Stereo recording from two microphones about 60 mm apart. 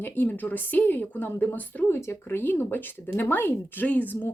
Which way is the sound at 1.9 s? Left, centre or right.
Left.